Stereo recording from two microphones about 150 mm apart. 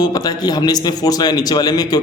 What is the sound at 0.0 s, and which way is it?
A man's voice, 25° left (ahead or behind).